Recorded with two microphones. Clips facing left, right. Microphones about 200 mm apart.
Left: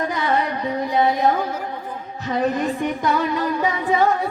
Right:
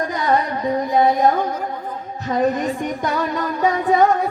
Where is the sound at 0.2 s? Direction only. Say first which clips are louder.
Right 5 dB; 45° right (ahead or behind).